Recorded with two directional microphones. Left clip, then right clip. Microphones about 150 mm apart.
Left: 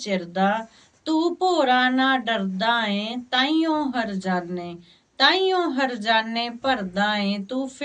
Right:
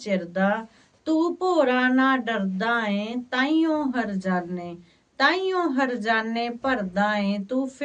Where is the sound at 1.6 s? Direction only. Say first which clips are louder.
Left 2 dB; 45° right (ahead or behind).